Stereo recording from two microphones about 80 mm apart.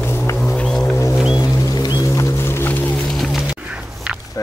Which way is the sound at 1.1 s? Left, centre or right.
Centre.